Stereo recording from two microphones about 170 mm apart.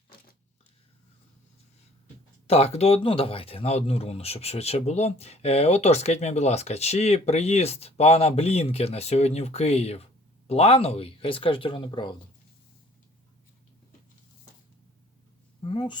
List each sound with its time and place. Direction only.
2.5 s speech: 40° left (ahead or behind)
15.6 s speech: 30° left (ahead or behind)